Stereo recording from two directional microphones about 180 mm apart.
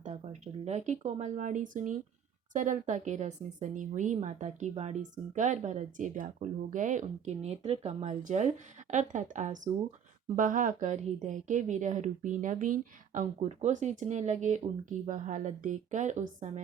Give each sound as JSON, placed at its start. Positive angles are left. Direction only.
{"t": 0.0, "sound": "speech", "side_deg": -40}